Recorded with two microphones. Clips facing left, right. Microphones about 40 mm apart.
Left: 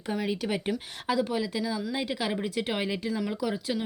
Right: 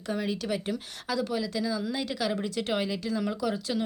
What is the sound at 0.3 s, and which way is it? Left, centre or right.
Speech, left.